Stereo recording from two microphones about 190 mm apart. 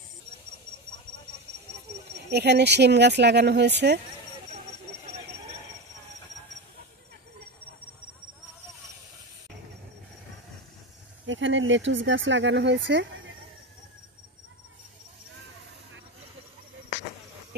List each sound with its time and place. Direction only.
2.3 s speech: 60° right (ahead or behind)
11.2 s speech: 80° right